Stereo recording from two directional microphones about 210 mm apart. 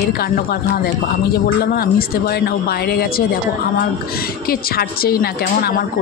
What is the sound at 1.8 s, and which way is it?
Speech, 45° left (ahead or behind).